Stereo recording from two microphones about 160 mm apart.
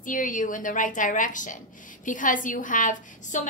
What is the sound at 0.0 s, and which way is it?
A woman's voice, 55° left (ahead or behind).